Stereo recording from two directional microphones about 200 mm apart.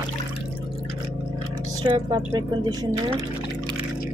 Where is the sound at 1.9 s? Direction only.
20° right (ahead or behind).